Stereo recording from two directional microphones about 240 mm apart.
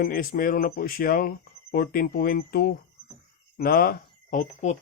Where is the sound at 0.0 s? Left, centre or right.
Left.